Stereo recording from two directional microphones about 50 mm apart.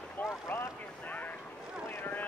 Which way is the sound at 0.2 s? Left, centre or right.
Left.